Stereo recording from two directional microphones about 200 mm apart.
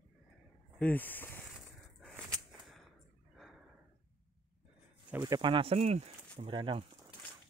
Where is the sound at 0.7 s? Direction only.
10° left (ahead or behind).